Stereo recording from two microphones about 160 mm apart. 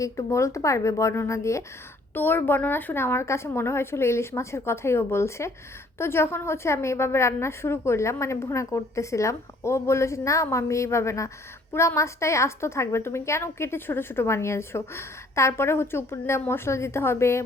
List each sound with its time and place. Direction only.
0.0 s a woman's voice: 20° left (ahead or behind)